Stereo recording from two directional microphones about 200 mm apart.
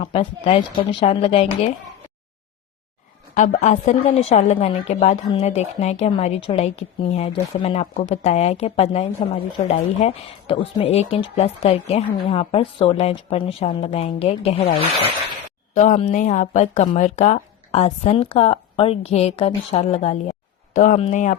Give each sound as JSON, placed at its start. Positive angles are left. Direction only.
{"t": 0.0, "sound": "speech", "side_deg": 30}
{"t": 3.3, "sound": "a woman's voice", "side_deg": 35}